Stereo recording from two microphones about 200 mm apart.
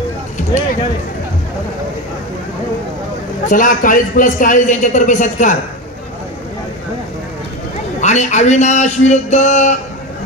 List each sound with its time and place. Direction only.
3.4 s a man's voice: 40° left (ahead or behind)
8.0 s a man's voice: 35° left (ahead or behind)